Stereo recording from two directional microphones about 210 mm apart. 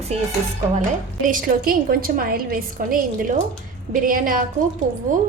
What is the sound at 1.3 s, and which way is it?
A woman's voice, 40° right (ahead or behind).